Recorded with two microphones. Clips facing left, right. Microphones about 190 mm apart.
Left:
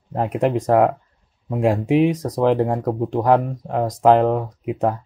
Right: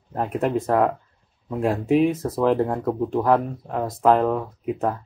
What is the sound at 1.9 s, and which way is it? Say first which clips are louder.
Speech: right 1 dB; 85° left.